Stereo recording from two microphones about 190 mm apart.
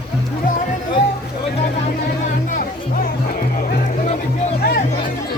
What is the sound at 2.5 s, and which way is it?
Music, 45° left (ahead or behind).